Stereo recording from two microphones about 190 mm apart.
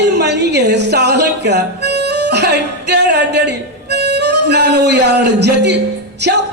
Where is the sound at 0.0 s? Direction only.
65° right (ahead or behind).